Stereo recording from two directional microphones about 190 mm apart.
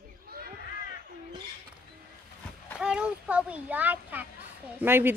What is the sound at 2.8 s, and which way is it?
A child's voice, 5° right (ahead or behind).